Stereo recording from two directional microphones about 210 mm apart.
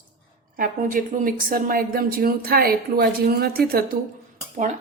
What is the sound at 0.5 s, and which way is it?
A woman's voice, 40° right (ahead or behind).